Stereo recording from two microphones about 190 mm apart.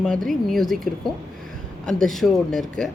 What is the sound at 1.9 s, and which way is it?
Speech, centre (ahead or behind).